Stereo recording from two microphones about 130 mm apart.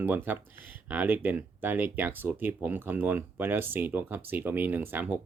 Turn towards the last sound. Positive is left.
turn(degrees=-15)  # may be behind; listen again after turning